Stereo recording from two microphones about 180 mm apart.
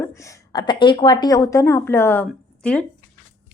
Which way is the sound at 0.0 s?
15° left (ahead or behind).